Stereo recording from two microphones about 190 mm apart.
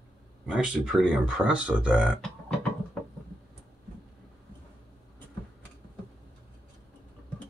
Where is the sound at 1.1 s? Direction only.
5° right (ahead or behind).